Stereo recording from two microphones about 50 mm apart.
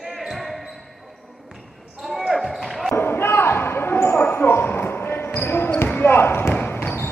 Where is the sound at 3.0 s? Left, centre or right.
Left.